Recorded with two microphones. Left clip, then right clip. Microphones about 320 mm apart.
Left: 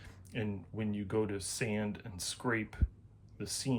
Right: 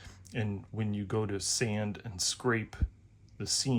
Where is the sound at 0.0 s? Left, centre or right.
Centre.